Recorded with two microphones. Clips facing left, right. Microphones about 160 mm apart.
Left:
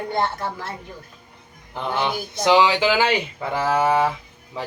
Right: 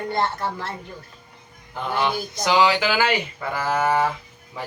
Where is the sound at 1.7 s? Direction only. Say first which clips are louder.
Even; 20° left (ahead or behind).